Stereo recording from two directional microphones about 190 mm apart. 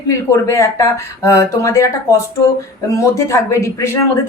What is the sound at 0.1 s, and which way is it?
A woman's voice, 15° left (ahead or behind).